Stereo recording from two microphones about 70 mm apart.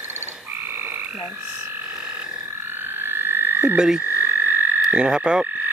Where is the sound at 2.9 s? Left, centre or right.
Right.